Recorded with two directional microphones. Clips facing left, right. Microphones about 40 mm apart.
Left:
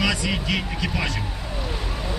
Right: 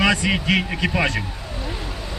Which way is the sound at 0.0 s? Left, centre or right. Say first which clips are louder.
Right 5 dB; right.